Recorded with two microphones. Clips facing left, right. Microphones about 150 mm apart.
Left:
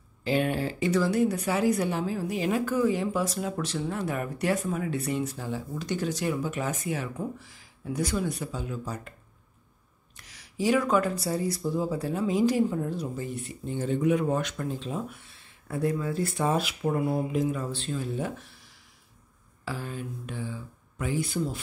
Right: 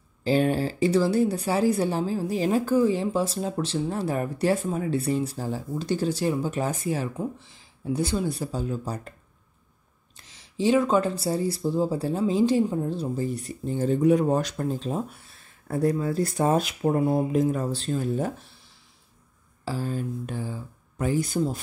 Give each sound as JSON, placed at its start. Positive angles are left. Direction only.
{"t": 0.2, "sound": "speech", "side_deg": -35}
{"t": 10.1, "sound": "speech", "side_deg": -25}
{"t": 19.6, "sound": "speech", "side_deg": -35}